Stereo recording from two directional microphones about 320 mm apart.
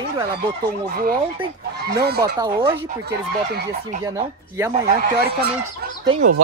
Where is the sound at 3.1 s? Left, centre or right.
Right.